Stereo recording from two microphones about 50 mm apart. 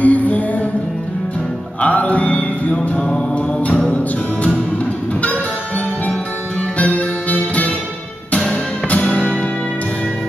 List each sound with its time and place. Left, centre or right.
0.0 s music: left
1.8 s music: left
3.0 s mantra: centre
3.6 s music: left
6.8 s music: left
8.3 s music: centre